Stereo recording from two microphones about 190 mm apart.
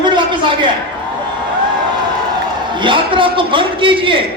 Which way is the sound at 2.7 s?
25° right (ahead or behind).